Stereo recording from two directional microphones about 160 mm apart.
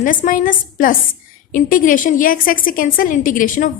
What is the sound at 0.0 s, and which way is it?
Speech, 55° left (ahead or behind).